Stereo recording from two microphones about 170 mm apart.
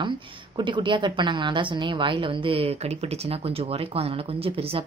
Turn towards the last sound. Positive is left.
turn(degrees=-35)  # may be behind; listen again after turning